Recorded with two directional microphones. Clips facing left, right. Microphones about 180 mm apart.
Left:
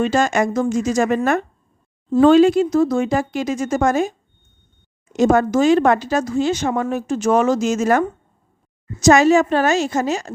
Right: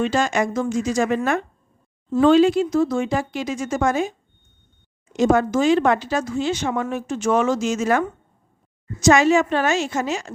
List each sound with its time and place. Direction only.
0.0 s speech: 45° left (ahead or behind)
5.1 s a woman's voice: 45° left (ahead or behind)